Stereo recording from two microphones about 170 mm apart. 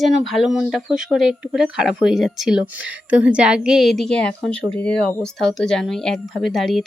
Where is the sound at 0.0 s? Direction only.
Centre (ahead or behind).